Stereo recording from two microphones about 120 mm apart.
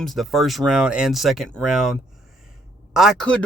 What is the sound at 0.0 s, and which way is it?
Speech, centre (ahead or behind).